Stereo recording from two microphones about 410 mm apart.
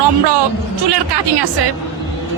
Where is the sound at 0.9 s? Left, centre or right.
Right.